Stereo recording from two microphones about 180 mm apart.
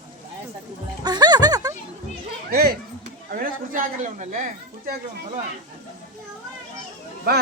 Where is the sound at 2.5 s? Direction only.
60° right (ahead or behind); by 4.4 s 45° right (ahead or behind).